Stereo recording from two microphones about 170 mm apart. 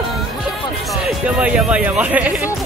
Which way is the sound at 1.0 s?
5° right (ahead or behind).